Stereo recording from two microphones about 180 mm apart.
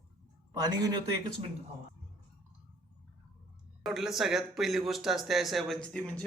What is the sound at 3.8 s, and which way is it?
A man's voice, centre (ahead or behind).